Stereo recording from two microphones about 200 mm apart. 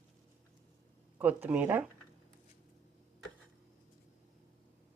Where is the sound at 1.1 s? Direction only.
10° right (ahead or behind).